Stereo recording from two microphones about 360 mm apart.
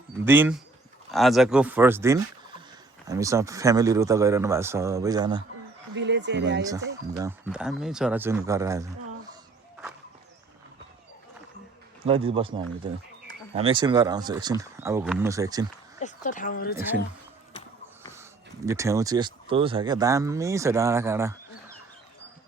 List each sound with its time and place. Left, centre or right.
0.3 s speech: centre
5.9 s speech: right
6.6 s speech: centre
12.0 s speech: centre
16.0 s speech: left
18.1 s speech: centre